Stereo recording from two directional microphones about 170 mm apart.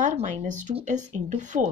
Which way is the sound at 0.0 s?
45° right (ahead or behind).